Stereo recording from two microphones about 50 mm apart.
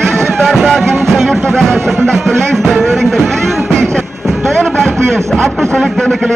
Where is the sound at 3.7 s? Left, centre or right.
Centre.